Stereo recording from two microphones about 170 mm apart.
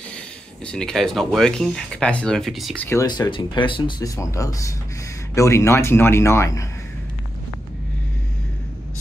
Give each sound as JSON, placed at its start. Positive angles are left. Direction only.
{"t": 0.7, "sound": "speech", "side_deg": 5}
{"t": 2.8, "sound": "speech", "side_deg": 15}
{"t": 3.1, "sound": "speech", "side_deg": 25}